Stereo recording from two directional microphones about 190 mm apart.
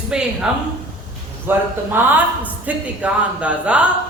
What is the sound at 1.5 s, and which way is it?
A woman's voice, 10° right (ahead or behind).